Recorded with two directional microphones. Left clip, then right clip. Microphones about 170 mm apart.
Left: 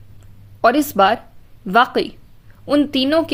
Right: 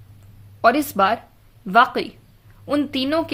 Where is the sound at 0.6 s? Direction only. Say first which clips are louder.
Left 3 dB; 35° left (ahead or behind).